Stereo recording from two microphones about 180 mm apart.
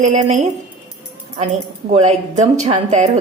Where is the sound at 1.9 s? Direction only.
35° right (ahead or behind).